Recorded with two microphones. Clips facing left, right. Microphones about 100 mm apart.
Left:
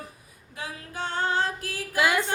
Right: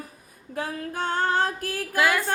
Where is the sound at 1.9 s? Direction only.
20° left (ahead or behind).